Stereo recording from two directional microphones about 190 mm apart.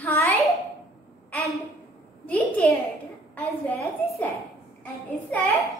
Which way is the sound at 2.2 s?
10° left (ahead or behind).